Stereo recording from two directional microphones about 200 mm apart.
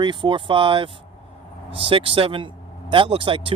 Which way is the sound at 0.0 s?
25° right (ahead or behind).